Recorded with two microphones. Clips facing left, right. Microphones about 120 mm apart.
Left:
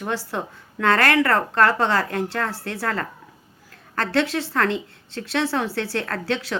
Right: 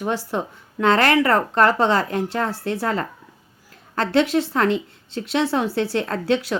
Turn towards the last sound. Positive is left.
turn(degrees=-15)  # may be behind; listen again after turning